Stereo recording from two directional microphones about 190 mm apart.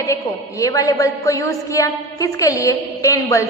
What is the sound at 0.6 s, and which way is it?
A woman's voice, 15° left (ahead or behind).